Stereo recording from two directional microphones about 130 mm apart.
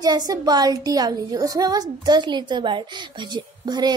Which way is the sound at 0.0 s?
30° right (ahead or behind).